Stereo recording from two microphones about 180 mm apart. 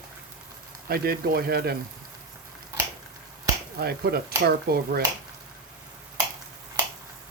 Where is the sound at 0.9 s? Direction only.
60° right (ahead or behind).